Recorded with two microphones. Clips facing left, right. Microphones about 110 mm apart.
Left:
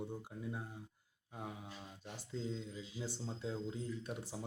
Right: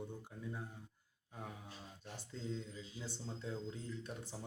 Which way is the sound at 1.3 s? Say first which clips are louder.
Left 3 dB; 10° left (ahead or behind).